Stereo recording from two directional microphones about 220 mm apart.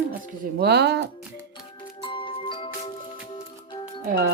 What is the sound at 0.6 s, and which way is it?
Speech, 50° right (ahead or behind).